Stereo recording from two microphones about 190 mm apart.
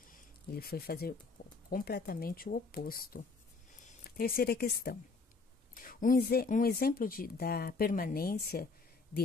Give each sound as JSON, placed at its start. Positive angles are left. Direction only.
{"t": 0.1, "sound": "speech", "side_deg": 55}